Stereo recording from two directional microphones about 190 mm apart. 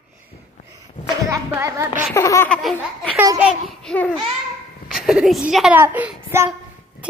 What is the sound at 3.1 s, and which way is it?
Speech, 10° right (ahead or behind).